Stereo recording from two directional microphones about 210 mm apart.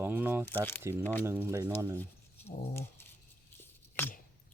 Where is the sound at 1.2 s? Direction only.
10° right (ahead or behind).